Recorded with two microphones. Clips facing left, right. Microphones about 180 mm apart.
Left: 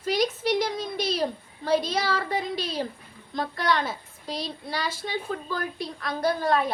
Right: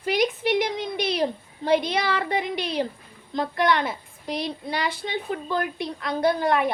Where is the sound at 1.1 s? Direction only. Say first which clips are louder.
Right 2 dB; 20° right (ahead or behind).